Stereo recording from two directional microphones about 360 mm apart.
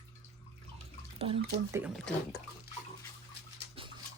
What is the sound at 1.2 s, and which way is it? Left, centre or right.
Speech, centre.